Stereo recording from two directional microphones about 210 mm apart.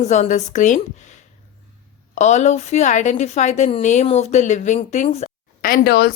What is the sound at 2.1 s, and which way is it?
A woman's voice, 35° left (ahead or behind).